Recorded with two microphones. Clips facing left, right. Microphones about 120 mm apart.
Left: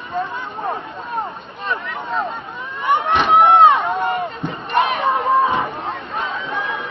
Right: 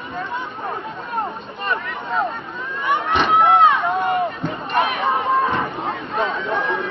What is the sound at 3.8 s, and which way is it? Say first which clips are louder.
Run: right 1 dB; centre (ahead or behind).